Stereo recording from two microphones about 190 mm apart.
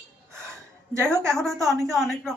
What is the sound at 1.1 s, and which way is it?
Speech, 15° right (ahead or behind).